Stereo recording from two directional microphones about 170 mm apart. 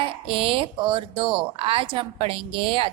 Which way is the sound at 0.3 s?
35° right (ahead or behind).